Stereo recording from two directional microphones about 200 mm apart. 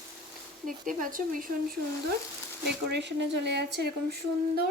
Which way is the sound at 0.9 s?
40° right (ahead or behind).